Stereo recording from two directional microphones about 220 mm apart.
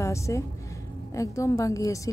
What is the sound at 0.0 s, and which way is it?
A woman's voice, 15° left (ahead or behind).